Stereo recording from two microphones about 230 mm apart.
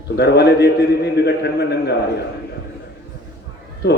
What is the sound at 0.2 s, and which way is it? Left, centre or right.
A man's voice, left.